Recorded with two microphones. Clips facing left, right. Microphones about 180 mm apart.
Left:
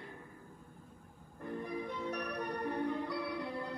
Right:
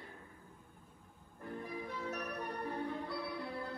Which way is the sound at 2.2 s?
15° left (ahead or behind).